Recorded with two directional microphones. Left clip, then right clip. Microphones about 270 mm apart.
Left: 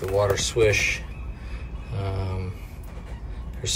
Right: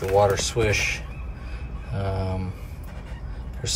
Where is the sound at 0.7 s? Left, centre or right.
Left.